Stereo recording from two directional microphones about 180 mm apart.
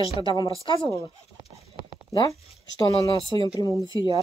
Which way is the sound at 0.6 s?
25° left (ahead or behind).